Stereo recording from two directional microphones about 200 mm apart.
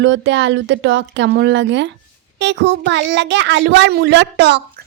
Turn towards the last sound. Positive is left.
turn(degrees=-60)  # may be behind; listen again after turning